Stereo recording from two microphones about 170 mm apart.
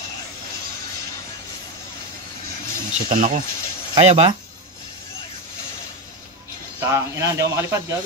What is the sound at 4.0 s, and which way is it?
Speech, 35° right (ahead or behind).